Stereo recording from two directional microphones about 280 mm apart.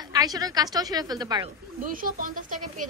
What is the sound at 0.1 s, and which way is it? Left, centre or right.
A woman's voice, centre.